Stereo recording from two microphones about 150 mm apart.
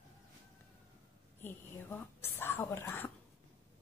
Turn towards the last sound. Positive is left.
turn(degrees=15)  # may be behind; listen again after turning